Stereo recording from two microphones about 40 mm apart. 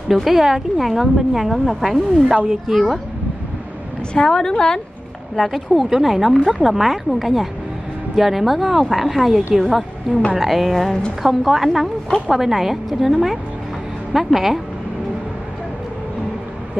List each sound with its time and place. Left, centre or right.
0.1 s speech: centre
4.1 s a woman's voice: centre
5.3 s a woman's voice: centre